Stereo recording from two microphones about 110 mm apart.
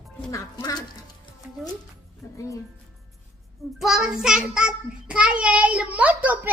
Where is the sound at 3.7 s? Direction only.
5° right (ahead or behind).